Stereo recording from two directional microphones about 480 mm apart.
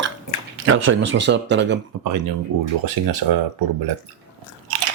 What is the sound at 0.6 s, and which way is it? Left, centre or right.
Speech, right.